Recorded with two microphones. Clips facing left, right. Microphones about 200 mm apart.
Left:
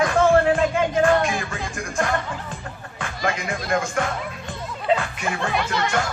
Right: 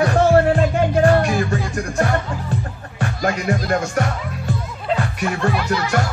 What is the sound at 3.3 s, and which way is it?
Music, 40° right (ahead or behind).